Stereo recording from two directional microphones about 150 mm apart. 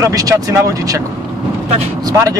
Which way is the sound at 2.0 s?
20° right (ahead or behind).